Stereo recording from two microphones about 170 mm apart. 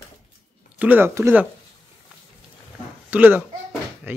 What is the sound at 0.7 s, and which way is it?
Speech, 10° right (ahead or behind).